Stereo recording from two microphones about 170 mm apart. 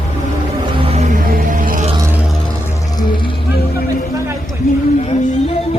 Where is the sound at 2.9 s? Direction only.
30° left (ahead or behind).